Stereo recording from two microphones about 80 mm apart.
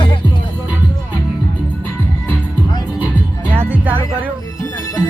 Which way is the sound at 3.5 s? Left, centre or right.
Right.